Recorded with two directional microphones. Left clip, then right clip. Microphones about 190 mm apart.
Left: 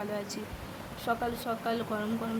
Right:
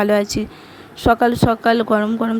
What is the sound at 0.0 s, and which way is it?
Speech, 50° right (ahead or behind).